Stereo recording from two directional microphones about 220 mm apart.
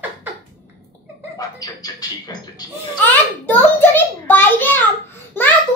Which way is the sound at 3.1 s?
10° left (ahead or behind).